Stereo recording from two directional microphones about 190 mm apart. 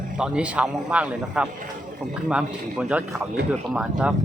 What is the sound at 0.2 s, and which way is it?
A man's voice, 5° right (ahead or behind).